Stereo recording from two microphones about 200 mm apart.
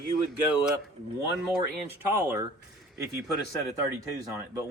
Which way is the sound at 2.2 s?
15° right (ahead or behind).